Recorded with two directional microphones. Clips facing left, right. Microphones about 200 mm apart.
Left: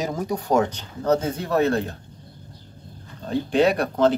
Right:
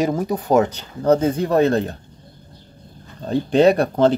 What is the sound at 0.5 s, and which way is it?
Speech, 10° right (ahead or behind).